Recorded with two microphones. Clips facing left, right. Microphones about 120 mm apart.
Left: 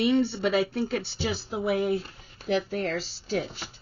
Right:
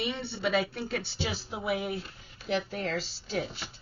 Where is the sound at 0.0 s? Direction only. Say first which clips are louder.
Left 9 dB; 40° left (ahead or behind).